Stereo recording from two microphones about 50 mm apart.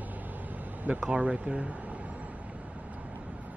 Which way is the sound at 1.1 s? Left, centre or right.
Right.